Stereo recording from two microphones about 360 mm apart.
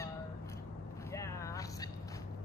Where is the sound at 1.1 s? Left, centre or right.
Centre.